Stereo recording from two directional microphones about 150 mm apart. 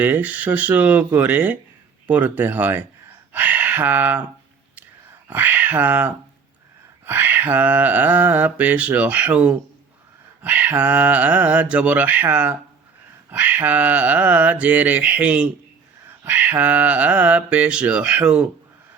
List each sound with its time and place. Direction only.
0.0 s mantra: 10° right (ahead or behind)
3.3 s speech: 10° right (ahead or behind)
5.3 s mantra: 10° right (ahead or behind)